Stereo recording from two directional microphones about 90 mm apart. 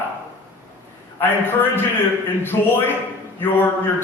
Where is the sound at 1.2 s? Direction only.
25° left (ahead or behind).